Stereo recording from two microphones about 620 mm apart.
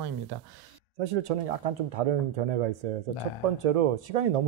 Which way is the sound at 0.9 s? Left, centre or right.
Right.